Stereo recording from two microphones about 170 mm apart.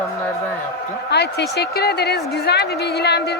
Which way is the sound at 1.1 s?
80° left.